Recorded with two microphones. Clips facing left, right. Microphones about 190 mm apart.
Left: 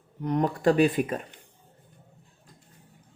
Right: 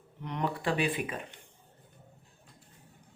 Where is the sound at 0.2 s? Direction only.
40° left (ahead or behind).